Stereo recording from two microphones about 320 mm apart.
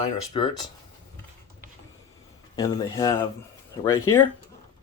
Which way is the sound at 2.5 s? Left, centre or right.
Centre.